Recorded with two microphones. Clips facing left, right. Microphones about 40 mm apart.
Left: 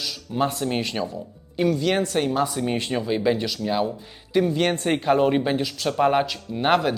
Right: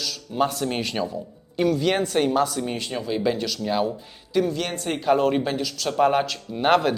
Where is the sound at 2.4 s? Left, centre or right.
Centre.